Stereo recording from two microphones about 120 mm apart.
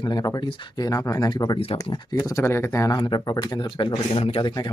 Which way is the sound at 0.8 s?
30° left (ahead or behind).